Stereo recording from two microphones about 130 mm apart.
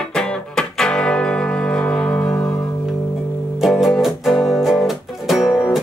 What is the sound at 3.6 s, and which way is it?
Music, centre (ahead or behind).